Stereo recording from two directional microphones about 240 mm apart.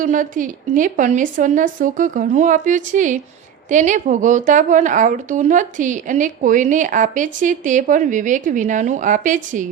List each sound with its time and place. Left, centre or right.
0.0 s a woman's voice: right